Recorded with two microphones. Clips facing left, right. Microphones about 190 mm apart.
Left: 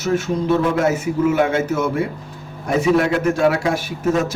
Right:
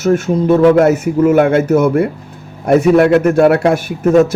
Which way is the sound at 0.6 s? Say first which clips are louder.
Right 9 dB; 70° right (ahead or behind).